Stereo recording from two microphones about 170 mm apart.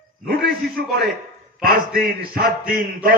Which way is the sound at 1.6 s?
60° right (ahead or behind).